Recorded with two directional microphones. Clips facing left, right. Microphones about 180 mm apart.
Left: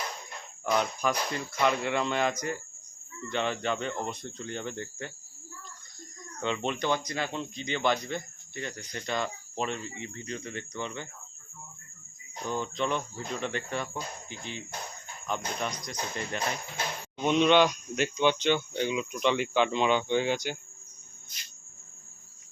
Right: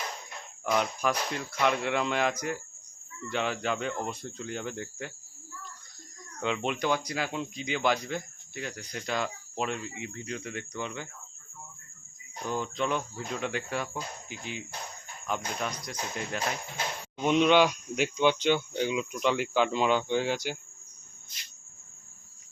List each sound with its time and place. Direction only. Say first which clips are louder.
0.6 s speech: even; centre (ahead or behind)
6.4 s speech: right 1 dB; 5° right (ahead or behind)
12.5 s speech: even; 5° right (ahead or behind)